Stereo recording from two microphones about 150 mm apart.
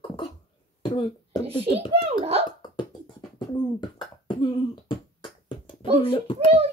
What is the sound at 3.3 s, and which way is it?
Beatboxing, 30° left (ahead or behind).